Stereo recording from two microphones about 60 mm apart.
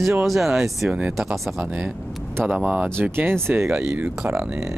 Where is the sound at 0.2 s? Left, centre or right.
Centre.